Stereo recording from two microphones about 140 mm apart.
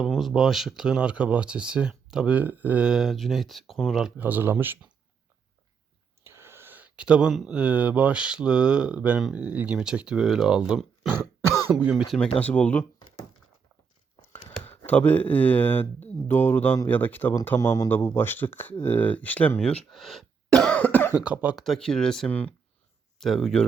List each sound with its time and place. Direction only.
0.0 s speech: centre (ahead or behind)
4.2 s speech: 15° right (ahead or behind)
6.2 s speech: 20° right (ahead or behind); by 12.3 s centre (ahead or behind)
12.4 s speech: 10° left (ahead or behind)
14.8 s speech: 10° left (ahead or behind)
21.2 s speech: 5° right (ahead or behind)